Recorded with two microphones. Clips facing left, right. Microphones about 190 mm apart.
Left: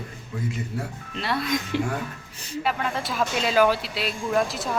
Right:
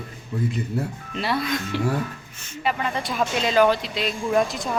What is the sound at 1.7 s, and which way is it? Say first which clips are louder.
Speech: right 1 dB; 20° left (ahead or behind).